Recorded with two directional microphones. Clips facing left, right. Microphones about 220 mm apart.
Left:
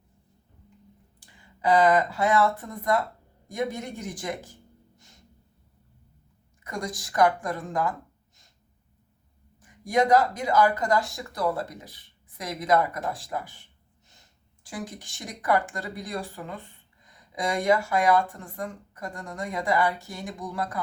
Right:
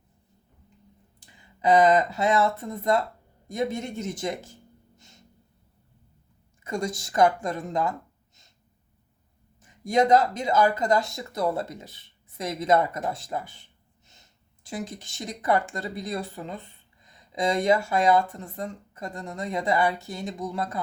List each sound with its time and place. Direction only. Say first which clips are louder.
1.2 s speech: right 2 dB; 20° right (ahead or behind)
6.7 s speech: right 4 dB; 25° right (ahead or behind)
9.6 s speech: right 1 dB; 25° right (ahead or behind)